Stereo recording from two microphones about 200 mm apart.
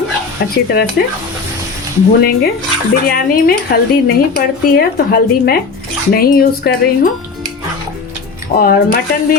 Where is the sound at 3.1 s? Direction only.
50° left (ahead or behind).